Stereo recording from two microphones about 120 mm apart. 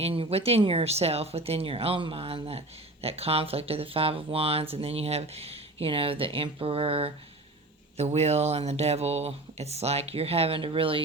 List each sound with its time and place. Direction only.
0.0 s speech: 50° right (ahead or behind)
7.9 s speech: 65° right (ahead or behind); by 11.0 s 50° right (ahead or behind)